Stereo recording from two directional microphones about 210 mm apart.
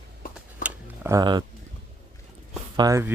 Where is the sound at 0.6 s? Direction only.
10° right (ahead or behind).